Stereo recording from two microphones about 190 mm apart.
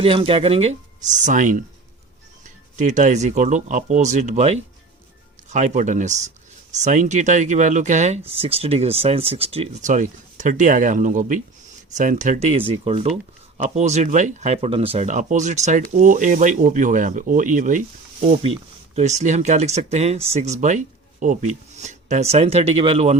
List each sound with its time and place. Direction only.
0.0 s speech: 30° right (ahead or behind)
1.1 s speech: 40° right (ahead or behind)
2.7 s speech: 40° right (ahead or behind)